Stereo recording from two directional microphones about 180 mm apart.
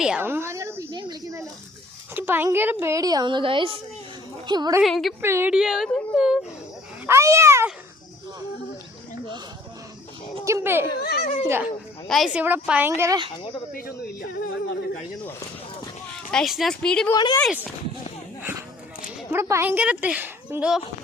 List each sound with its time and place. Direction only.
0.0 s a woman's voice: 10° right (ahead or behind)
0.9 s a sound: 20° right (ahead or behind)
2.1 s a woman's voice: 10° right (ahead or behind)
4.8 s speech: centre (ahead or behind)
5.2 s speech: 15° right (ahead or behind)
7.1 s speech: 15° right (ahead or behind)
10.4 s a child's voice: 15° right (ahead or behind)
11.0 s a child's voice: 55° left (ahead or behind)
11.4 s speech: 10° right (ahead or behind)
12.0 s speech: centre (ahead or behind)
13.7 s speech: 55° left (ahead or behind)
16.3 s speech: centre (ahead or behind)
17.1 s speech: 25° left (ahead or behind)
19.3 s speech: 15° right (ahead or behind)